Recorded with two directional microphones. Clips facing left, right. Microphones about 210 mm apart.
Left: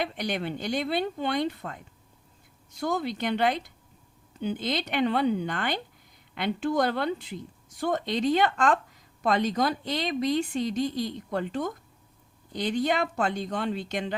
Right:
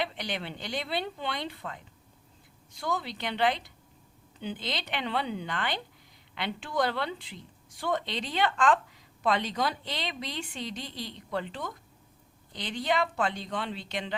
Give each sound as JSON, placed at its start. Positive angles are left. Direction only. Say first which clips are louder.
{"t": 0.0, "sound": "speech", "louder": "left 4 dB", "side_deg": 45}